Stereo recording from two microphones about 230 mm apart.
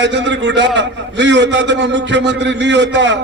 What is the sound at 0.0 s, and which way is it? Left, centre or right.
A man's voice, right.